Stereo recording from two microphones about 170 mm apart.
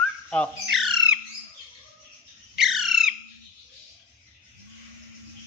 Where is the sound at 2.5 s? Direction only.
Centre (ahead or behind).